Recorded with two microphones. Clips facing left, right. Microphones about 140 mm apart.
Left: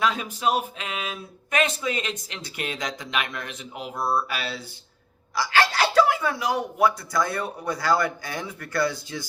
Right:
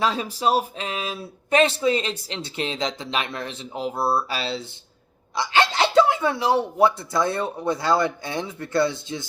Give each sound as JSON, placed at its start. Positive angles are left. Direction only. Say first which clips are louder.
{"t": 0.0, "sound": "speech", "louder": "right 2 dB", "side_deg": -30}